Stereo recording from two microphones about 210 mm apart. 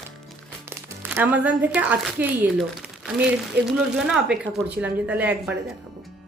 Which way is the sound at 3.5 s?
50° right (ahead or behind).